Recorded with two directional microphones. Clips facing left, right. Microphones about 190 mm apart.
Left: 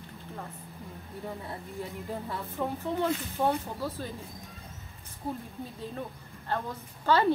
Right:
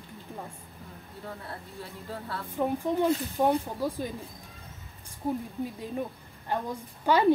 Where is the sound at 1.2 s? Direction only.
15° left (ahead or behind).